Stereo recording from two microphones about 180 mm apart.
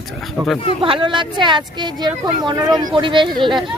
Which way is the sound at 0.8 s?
25° right (ahead or behind).